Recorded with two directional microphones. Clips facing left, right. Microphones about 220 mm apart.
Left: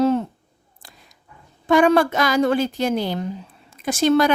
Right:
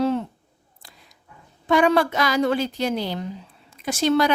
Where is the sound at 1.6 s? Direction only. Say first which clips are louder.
Left 3 dB; 45° left (ahead or behind).